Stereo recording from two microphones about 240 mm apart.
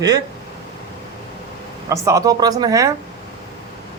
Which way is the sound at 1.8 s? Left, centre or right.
Centre.